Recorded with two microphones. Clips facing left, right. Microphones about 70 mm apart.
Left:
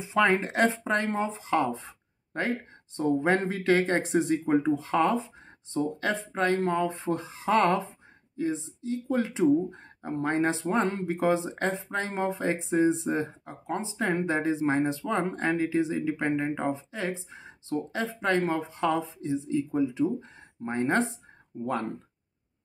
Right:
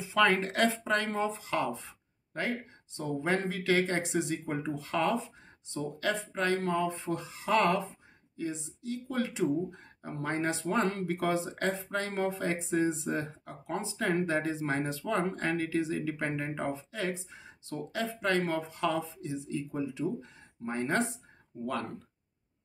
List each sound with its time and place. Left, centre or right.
0.0 s speech: left